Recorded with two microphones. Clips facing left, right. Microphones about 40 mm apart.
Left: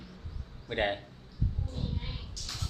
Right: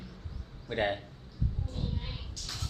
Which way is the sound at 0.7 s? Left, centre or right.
Left.